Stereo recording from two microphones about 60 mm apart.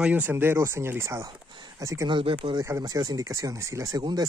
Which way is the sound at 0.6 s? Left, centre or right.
Right.